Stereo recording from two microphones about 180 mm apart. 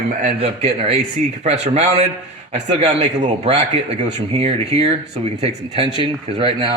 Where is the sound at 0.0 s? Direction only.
45° right (ahead or behind).